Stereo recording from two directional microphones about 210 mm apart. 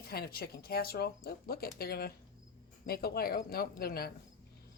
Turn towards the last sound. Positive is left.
turn(degrees=45)  # may be behind; listen again after turning